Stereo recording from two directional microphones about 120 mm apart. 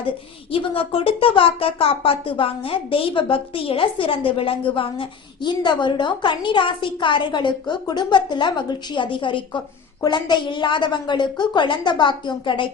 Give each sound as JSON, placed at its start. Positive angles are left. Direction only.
{"t": 0.5, "sound": "speech", "side_deg": 50}